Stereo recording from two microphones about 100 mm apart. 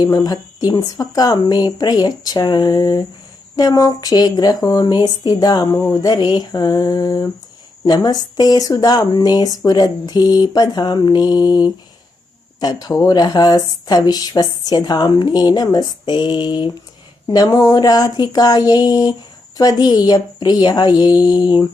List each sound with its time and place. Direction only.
0.0 s speech: 40° left (ahead or behind)